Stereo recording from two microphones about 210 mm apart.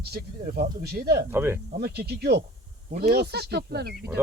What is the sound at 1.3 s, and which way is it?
Speech, 10° right (ahead or behind).